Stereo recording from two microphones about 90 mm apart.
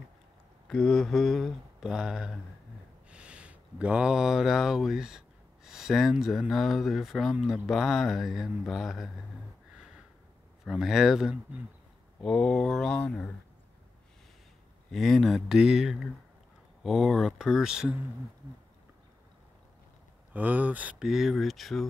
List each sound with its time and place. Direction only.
0.7 s speech: 5° left (ahead or behind)
10.6 s speech: 5° right (ahead or behind)
12.2 s speech: 5° left (ahead or behind)
14.9 s speech: centre (ahead or behind)
20.3 s speech: 20° right (ahead or behind)
21.0 s speech: 5° right (ahead or behind)